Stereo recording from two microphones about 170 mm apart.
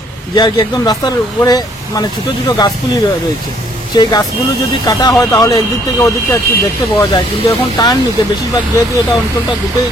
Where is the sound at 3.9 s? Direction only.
25° left (ahead or behind).